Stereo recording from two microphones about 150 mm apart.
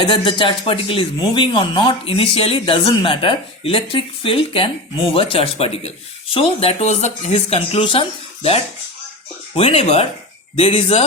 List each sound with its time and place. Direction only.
0.0 s speech: 35° left (ahead or behind)